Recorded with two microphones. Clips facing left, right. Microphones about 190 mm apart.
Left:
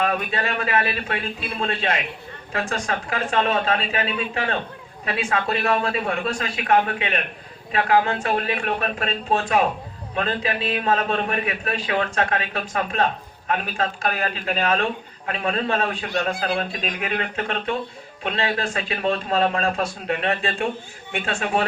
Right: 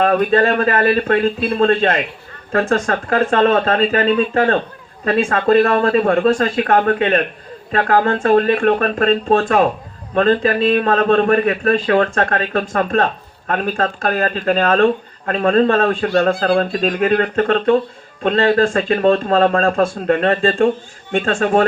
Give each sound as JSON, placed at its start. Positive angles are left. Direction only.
{"t": 0.0, "sound": "a man's voice", "side_deg": -50}